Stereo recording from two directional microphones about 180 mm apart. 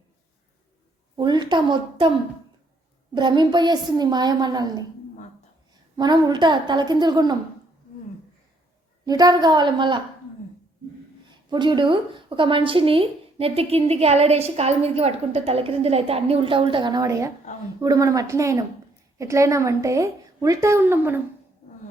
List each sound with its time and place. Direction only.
1.1 s a woman's voice: 25° right (ahead or behind)
3.2 s a woman's voice: 25° right (ahead or behind)
6.0 s a woman's voice: 25° right (ahead or behind)
9.0 s a woman's voice: 20° right (ahead or behind)
11.3 s a woman's voice: 25° right (ahead or behind)